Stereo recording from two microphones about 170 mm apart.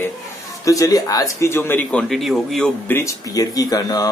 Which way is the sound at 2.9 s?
20° left (ahead or behind).